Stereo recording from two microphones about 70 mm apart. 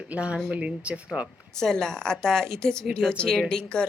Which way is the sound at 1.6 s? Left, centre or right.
Centre.